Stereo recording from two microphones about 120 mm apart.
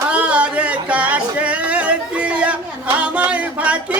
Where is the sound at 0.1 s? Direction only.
10° right (ahead or behind).